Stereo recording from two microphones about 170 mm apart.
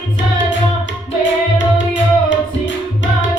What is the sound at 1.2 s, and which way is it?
Music, 90° left.